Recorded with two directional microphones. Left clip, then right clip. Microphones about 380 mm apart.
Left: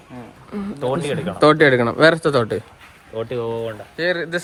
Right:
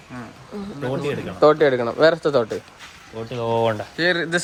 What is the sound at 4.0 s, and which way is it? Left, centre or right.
Speech, centre.